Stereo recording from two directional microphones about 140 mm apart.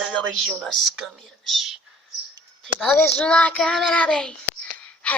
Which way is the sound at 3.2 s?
10° left (ahead or behind).